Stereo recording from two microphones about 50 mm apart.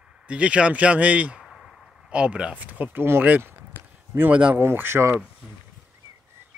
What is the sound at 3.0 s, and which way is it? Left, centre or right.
Speech, right.